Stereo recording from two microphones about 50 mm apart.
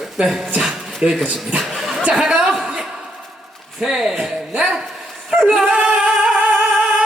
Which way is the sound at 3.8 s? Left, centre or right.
Centre.